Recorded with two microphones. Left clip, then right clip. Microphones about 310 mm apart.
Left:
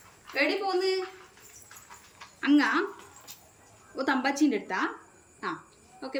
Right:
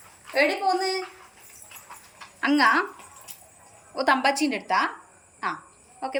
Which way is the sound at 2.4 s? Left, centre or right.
Centre.